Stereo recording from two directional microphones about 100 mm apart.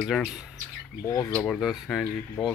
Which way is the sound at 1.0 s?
30° left (ahead or behind).